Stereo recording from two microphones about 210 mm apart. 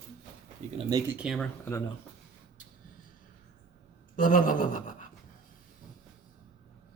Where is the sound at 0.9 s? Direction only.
20° right (ahead or behind).